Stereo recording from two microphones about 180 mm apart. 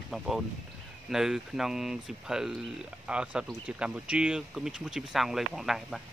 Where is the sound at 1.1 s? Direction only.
Centre (ahead or behind).